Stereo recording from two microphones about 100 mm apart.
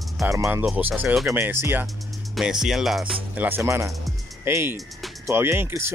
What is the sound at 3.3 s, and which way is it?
Speech, 20° right (ahead or behind).